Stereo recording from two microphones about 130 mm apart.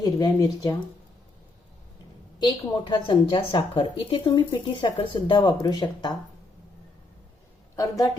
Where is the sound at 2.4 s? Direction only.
35° left (ahead or behind).